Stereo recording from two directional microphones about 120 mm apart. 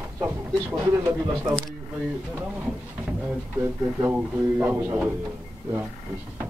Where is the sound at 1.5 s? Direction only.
10° left (ahead or behind).